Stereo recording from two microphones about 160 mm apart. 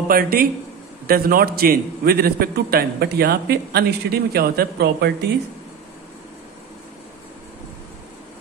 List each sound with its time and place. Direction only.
0.1 s a man's voice: 65° right (ahead or behind); by 5.1 s 80° right